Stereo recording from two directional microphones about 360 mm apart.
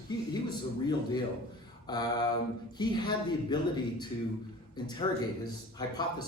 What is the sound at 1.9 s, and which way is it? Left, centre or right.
A man's voice, centre.